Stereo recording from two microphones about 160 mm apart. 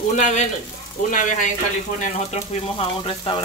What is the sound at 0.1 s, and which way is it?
Speech, 50° left (ahead or behind).